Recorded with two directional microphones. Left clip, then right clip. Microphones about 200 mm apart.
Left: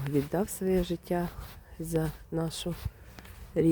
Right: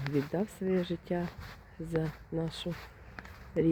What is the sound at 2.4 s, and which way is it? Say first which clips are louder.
Speech: left 3 dB; 10° left (ahead or behind).